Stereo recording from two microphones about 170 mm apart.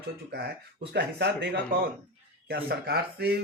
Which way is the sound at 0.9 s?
70° right (ahead or behind).